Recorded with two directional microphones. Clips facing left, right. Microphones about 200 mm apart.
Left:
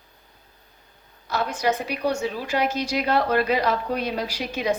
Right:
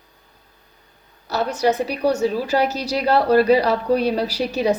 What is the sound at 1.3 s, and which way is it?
A woman's voice, 40° right (ahead or behind).